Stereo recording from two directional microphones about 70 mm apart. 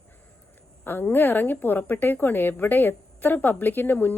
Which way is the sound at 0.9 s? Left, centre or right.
Left.